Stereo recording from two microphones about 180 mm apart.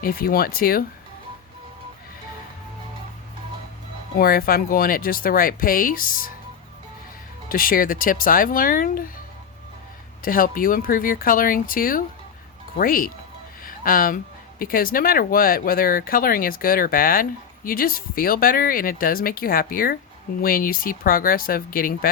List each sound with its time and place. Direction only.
0.0 s speech: 55° left (ahead or behind)
4.2 s speech: 55° left (ahead or behind)
7.4 s speech: 50° left (ahead or behind)
10.2 s speech: 50° left (ahead or behind)
13.7 s a sound: 50° left (ahead or behind)
14.6 s speech: 55° left (ahead or behind)